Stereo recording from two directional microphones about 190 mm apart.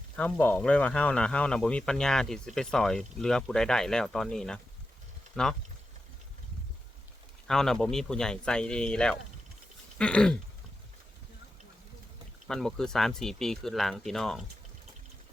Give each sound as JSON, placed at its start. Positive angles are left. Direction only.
{"t": 0.2, "sound": "speech", "side_deg": 10}
{"t": 7.4, "sound": "speech", "side_deg": 0}
{"t": 12.5, "sound": "speech", "side_deg": 0}